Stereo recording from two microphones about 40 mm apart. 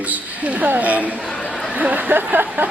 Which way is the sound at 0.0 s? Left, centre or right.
Right.